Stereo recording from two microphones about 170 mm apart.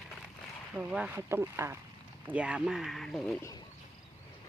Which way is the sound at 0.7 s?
10° right (ahead or behind).